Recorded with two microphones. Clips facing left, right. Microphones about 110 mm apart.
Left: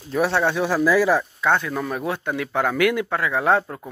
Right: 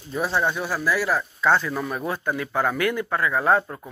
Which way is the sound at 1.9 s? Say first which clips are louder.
Left 1 dB; 75° left (ahead or behind).